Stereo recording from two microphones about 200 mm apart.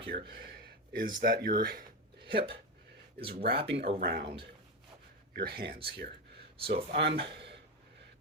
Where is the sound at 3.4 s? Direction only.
55° right (ahead or behind).